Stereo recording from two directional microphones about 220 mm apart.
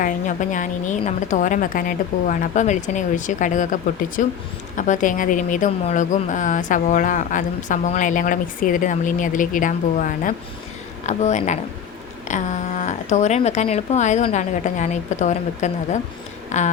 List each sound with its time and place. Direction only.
0.0 s speech: 35° left (ahead or behind)